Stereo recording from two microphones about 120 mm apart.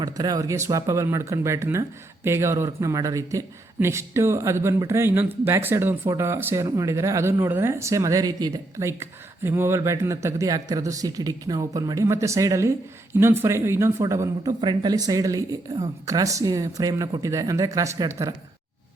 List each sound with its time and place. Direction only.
0.0 s a woman's voice: 35° right (ahead or behind)